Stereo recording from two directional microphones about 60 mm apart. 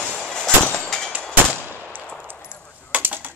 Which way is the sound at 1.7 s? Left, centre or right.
Right.